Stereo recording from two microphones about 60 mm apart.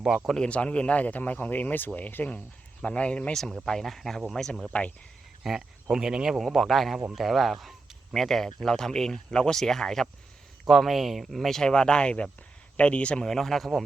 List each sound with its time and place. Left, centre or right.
0.4 s speech: left
3.3 s speech: centre
5.4 s speech: centre
13.2 s speech: centre